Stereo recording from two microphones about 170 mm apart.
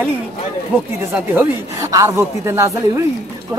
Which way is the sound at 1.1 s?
15° right (ahead or behind).